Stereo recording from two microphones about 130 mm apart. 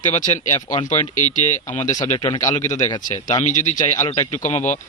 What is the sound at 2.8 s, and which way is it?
Speech, 35° left (ahead or behind).